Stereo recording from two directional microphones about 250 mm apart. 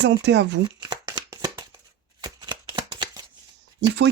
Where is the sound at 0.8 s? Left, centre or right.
Centre.